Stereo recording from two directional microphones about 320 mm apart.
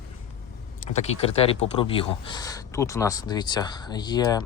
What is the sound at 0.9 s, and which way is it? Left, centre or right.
Speech, centre.